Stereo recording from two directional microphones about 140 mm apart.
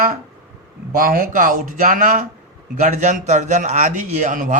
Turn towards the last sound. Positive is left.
turn(degrees=-65)  # may be behind; listen again after turning